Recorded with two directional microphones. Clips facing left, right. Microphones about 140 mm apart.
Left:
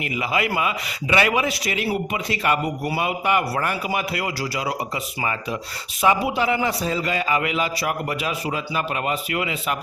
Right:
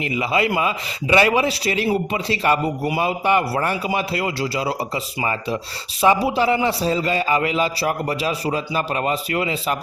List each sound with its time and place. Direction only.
0.0 s a man's voice: 25° right (ahead or behind)